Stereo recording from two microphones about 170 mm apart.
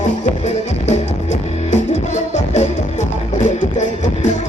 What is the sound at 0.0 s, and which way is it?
Music, 45° left (ahead or behind).